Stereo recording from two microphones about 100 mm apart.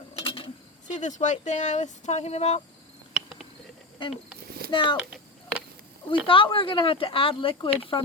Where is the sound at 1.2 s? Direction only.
90° left.